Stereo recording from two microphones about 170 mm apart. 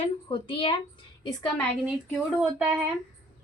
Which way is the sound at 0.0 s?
30° left (ahead or behind).